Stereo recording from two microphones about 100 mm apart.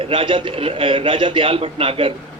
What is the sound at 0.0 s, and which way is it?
Speech, 60° right (ahead or behind).